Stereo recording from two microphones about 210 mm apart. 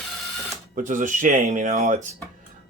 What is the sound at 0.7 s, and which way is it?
Speech, 40° right (ahead or behind).